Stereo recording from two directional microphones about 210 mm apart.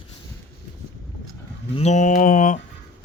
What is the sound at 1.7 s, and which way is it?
Speech, 35° left (ahead or behind).